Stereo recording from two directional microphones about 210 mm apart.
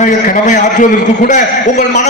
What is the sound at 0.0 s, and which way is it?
A man's voice, 35° left (ahead or behind).